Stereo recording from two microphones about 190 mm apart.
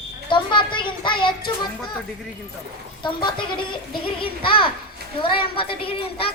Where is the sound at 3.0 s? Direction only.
25° left (ahead or behind).